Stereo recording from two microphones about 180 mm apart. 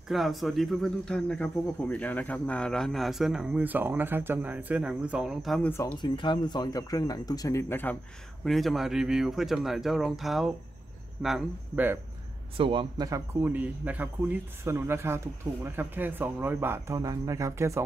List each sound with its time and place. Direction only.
0.1 s speech: centre (ahead or behind)
5.7 s speech: 15° left (ahead or behind)
8.5 s a man's voice: centre (ahead or behind)
12.5 s a man's voice: 30° right (ahead or behind)